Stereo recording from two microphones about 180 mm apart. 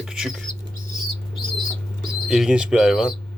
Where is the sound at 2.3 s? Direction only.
5° right (ahead or behind).